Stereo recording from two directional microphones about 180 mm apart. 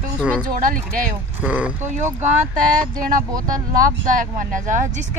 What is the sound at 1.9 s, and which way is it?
Speech, 40° right (ahead or behind).